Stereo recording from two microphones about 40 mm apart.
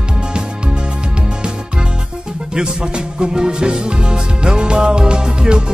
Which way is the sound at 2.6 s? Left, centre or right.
Right.